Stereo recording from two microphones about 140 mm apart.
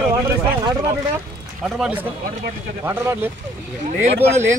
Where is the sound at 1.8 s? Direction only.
10° right (ahead or behind).